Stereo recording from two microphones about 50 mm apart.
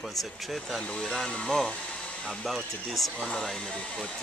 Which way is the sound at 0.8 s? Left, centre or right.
Centre.